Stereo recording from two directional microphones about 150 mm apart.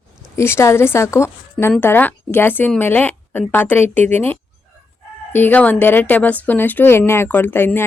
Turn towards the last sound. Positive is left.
turn(degrees=15)  # may be behind; listen again after turning